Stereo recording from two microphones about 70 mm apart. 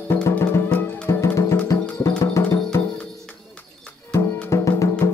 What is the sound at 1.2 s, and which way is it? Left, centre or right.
Music, left.